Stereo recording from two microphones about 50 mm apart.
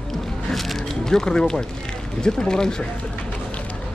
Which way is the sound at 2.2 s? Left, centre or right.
Centre.